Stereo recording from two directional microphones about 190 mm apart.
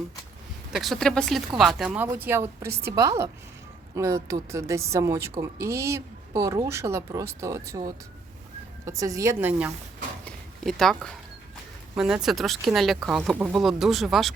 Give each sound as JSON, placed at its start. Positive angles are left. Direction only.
{"t": 0.7, "sound": "a woman's voice", "side_deg": 0}
{"t": 10.2, "sound": "a sound", "side_deg": 0}
{"t": 11.9, "sound": "speech", "side_deg": -5}